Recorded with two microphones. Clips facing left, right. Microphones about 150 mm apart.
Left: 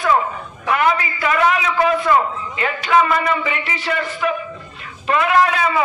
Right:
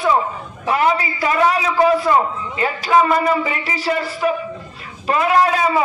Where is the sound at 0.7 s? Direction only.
35° right (ahead or behind).